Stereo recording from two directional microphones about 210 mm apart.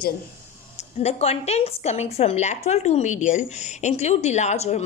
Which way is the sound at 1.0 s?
30° left (ahead or behind).